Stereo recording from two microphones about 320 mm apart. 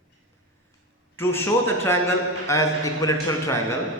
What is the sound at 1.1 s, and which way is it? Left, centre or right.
A man's voice, centre.